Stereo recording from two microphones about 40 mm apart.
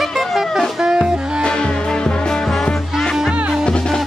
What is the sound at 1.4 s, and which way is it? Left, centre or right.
Music, left.